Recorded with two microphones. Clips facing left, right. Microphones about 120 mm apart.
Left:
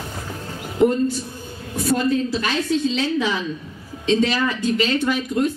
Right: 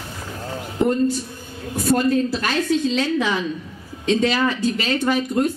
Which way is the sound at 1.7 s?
45° right (ahead or behind).